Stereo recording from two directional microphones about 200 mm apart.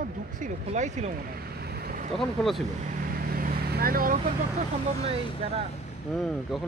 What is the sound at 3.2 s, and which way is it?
Vehicle, 45° right (ahead or behind).